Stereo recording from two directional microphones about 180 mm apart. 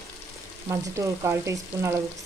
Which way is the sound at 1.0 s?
15° right (ahead or behind).